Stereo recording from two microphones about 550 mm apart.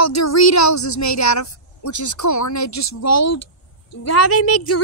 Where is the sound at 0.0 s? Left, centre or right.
Left.